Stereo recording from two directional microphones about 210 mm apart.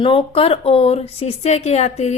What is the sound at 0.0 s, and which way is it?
Speech, 25° left (ahead or behind).